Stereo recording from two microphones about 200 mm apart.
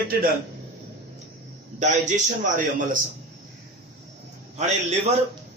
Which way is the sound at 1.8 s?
40° right (ahead or behind).